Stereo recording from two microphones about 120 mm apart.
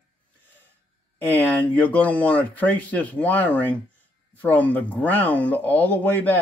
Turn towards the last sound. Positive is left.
turn(degrees=15)  # may be behind; listen again after turning